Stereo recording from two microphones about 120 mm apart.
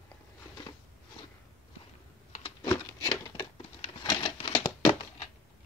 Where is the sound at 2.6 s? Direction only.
30° left (ahead or behind).